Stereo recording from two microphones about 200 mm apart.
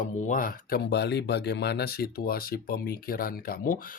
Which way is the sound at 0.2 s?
40° left (ahead or behind).